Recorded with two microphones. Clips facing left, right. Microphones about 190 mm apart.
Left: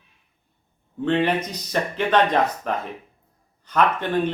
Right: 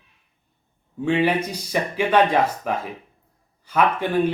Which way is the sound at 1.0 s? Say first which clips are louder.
Right 1 dB; 10° right (ahead or behind).